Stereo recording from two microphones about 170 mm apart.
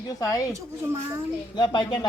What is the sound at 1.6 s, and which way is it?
Speech, 25° left (ahead or behind).